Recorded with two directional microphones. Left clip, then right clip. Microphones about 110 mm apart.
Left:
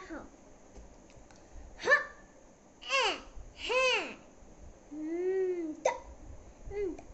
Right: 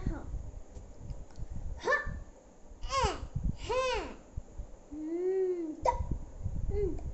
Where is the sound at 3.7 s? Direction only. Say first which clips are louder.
Left 3 dB; centre (ahead or behind).